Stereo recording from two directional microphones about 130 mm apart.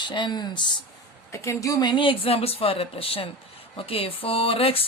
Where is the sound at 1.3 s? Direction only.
20° left (ahead or behind).